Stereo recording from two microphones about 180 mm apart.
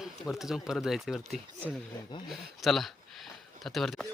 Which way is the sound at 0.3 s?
Centre (ahead or behind).